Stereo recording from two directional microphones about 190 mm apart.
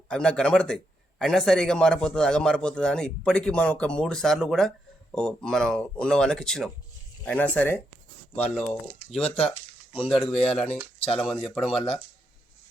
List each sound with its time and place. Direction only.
0.1 s a man's voice: 5° left (ahead or behind)
10.3 s speech: 30° left (ahead or behind)
11.3 s a man's voice: centre (ahead or behind)
11.7 s speech: 30° left (ahead or behind)